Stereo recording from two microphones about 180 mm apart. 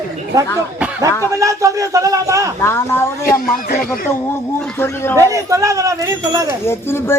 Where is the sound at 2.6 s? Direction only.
15° left (ahead or behind).